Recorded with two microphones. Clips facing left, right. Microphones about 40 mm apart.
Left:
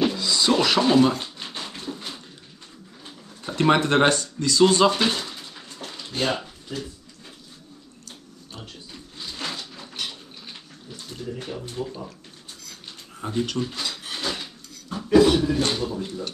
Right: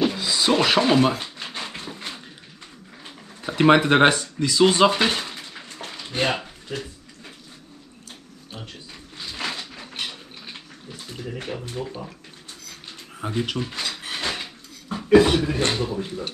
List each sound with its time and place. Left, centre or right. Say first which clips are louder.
0.1 s a sound: even; right
3.4 s speech: right 3 dB; right
9.3 s a sound: right 3 dB; right
11.2 s speech: right 1 dB; right
13.1 s drawer open or close: even; right
15.0 s a man's voice: right 1 dB; right